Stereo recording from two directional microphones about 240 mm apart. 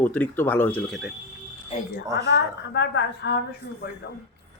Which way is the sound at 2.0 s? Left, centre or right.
Centre.